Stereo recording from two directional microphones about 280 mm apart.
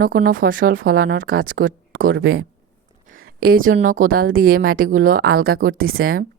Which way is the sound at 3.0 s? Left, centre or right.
Right.